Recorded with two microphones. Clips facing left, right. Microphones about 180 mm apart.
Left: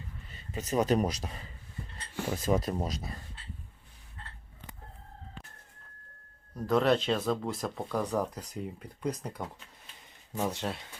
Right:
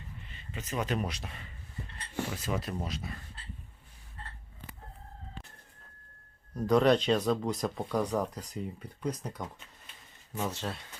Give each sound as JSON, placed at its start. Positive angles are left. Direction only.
{"t": 0.3, "sound": "a man's voice", "side_deg": 40}
{"t": 6.6, "sound": "speech", "side_deg": 0}